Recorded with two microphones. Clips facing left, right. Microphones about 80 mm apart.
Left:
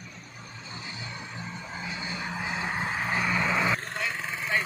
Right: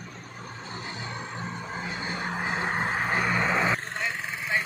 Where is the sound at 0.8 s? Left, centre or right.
Right.